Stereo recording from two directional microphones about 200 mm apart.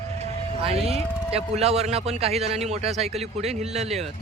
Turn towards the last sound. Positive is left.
turn(degrees=-30)  # may be behind; listen again after turning